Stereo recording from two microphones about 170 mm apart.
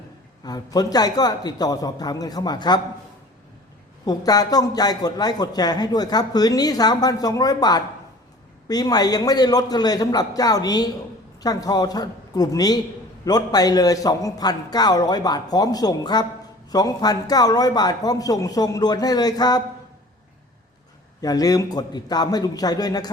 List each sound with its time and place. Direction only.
0.4 s speech: 20° left (ahead or behind)
4.0 s speech: 20° left (ahead or behind)
21.2 s speech: 20° left (ahead or behind)